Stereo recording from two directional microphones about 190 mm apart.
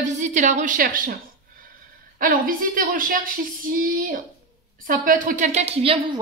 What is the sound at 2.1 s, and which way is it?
A woman's voice, 45° right (ahead or behind).